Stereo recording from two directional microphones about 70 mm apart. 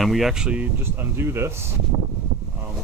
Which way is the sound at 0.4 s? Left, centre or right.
Centre.